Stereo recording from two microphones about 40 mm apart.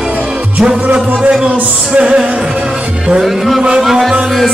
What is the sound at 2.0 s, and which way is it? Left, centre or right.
Music, right.